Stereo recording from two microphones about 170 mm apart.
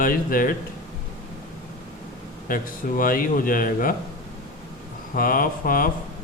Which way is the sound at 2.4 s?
55° left (ahead or behind).